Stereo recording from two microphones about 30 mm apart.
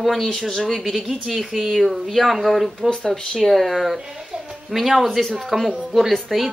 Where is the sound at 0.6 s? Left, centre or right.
Centre.